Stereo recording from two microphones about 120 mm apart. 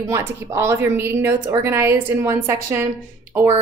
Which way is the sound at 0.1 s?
25° right (ahead or behind).